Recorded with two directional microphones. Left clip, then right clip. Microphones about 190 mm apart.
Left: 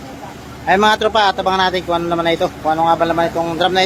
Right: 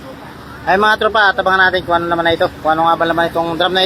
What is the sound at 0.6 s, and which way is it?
Speech, 5° left (ahead or behind).